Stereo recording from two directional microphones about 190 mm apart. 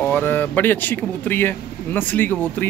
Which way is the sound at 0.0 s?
10° left (ahead or behind).